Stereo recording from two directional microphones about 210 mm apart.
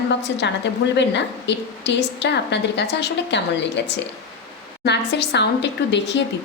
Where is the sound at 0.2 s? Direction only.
55° left (ahead or behind).